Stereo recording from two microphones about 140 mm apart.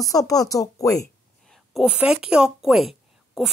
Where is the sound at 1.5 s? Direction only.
Centre (ahead or behind).